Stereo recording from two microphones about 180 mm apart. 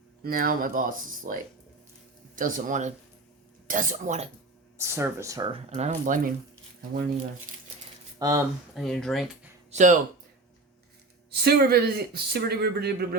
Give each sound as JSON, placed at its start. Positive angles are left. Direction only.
{"t": 0.2, "sound": "speech", "side_deg": -55}
{"t": 4.8, "sound": "speech", "side_deg": -15}
{"t": 5.6, "sound": "speech", "side_deg": -35}
{"t": 7.5, "sound": "speech", "side_deg": -50}
{"t": 8.2, "sound": "speech", "side_deg": -20}
{"t": 8.7, "sound": "speech", "side_deg": 0}
{"t": 9.7, "sound": "speech", "side_deg": -45}
{"t": 11.3, "sound": "speech", "side_deg": -60}